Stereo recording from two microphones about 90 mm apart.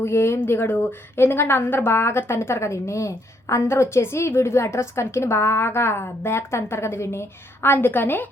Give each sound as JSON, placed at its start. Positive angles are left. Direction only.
{"t": 0.0, "sound": "a woman's voice", "side_deg": 30}